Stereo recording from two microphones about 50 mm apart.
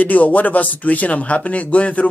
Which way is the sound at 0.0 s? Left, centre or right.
Left.